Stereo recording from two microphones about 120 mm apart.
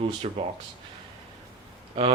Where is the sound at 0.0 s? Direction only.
55° right (ahead or behind).